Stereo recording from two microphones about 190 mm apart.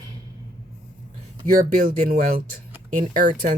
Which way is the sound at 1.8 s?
50° right (ahead or behind).